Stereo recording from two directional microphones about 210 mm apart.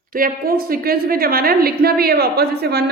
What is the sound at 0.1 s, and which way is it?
A woman's voice, 45° right (ahead or behind).